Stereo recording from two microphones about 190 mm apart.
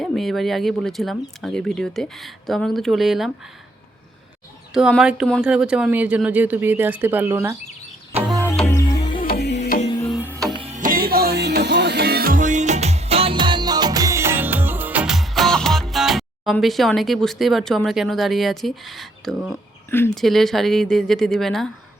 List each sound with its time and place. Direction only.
0.0 s speech: centre (ahead or behind)
4.7 s speech: centre (ahead or behind)
8.1 s music: 10° right (ahead or behind)
8.6 s music: 15° left (ahead or behind)
9.2 s music: 55° left (ahead or behind)
9.6 s music: 40° left (ahead or behind)
10.1 s music: 10° right (ahead or behind)
10.6 s music: 40° right (ahead or behind); by 19.5 s centre (ahead or behind)
19.9 s speech: 5° left (ahead or behind)